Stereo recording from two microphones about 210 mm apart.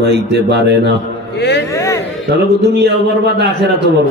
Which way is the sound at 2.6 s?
50° right (ahead or behind).